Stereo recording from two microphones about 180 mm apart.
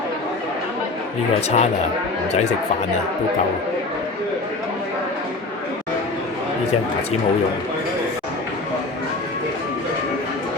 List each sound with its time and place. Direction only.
1.5 s speech: 35° left (ahead or behind)